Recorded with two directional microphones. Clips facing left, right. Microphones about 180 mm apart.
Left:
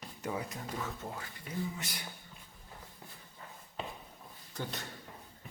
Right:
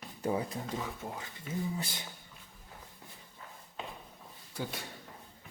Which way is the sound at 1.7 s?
30° right (ahead or behind).